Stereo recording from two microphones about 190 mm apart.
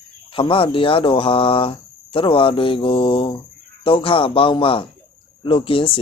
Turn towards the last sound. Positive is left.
turn(degrees=30)  # may be behind; listen again after turning